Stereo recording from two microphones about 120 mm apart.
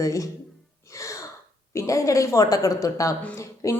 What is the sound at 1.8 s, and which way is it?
A woman's voice, 25° left (ahead or behind).